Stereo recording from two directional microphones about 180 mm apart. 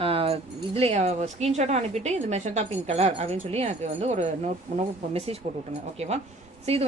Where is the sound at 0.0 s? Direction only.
30° right (ahead or behind).